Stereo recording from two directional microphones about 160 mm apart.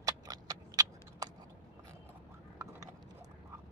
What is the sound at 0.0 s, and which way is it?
Horse, 25° right (ahead or behind).